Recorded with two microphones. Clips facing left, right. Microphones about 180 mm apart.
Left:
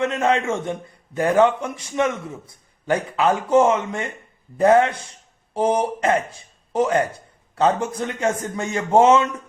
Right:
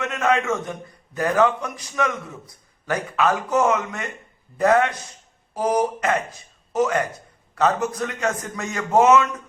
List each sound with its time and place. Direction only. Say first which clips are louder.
0.0 s a man's voice: left 2 dB; 30° left (ahead or behind)